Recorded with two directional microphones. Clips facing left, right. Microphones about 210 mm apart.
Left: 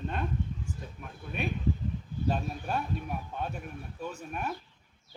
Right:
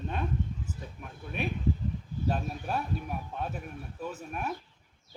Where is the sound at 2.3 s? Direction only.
Centre (ahead or behind).